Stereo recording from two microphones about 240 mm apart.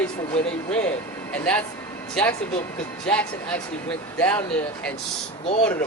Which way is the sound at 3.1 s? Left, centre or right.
Centre.